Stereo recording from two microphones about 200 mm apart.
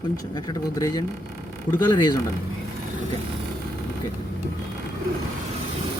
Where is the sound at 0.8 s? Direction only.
15° left (ahead or behind).